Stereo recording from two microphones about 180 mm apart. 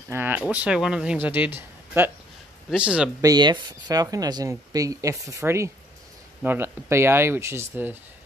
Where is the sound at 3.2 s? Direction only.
20° right (ahead or behind).